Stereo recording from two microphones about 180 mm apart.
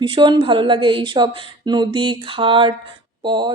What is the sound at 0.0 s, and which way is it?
A woman's voice, 25° right (ahead or behind).